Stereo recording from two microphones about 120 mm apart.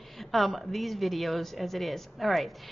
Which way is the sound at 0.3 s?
Centre (ahead or behind).